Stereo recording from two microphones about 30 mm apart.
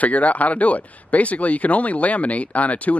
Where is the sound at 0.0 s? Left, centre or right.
Left.